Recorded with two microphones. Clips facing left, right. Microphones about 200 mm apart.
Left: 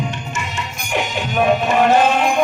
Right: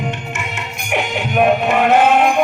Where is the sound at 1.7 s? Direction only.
60° right (ahead or behind).